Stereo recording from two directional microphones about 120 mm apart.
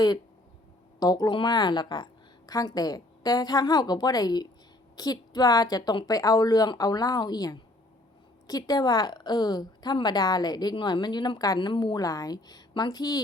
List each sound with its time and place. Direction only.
0.9 s a woman's voice: 30° left (ahead or behind)